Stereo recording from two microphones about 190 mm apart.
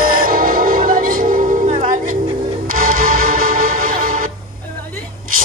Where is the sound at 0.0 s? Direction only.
50° right (ahead or behind).